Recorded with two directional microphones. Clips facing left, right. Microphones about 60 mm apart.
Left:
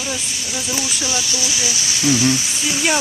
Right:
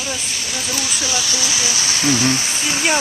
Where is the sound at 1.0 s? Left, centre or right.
Right.